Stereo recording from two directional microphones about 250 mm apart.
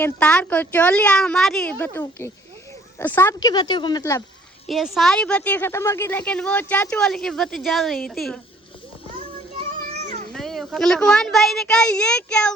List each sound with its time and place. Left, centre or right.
0.0 s a woman's voice: centre
4.6 s a woman's voice: centre
9.7 s children playing: right
10.3 s a woman's voice: centre